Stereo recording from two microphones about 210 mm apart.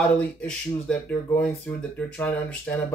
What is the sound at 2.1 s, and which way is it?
Speech, 5° left (ahead or behind).